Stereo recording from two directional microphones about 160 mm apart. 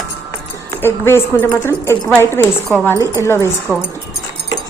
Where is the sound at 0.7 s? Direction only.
15° left (ahead or behind).